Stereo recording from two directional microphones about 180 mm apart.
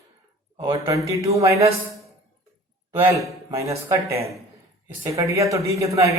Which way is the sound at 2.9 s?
15° right (ahead or behind).